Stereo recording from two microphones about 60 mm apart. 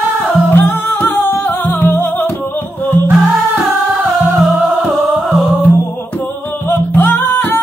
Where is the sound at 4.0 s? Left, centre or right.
Centre.